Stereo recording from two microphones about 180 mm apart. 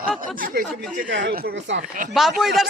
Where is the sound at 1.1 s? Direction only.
75° right (ahead or behind).